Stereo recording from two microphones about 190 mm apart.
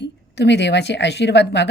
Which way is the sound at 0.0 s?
65° left (ahead or behind).